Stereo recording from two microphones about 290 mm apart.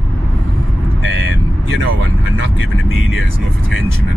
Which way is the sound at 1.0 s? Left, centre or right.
Right.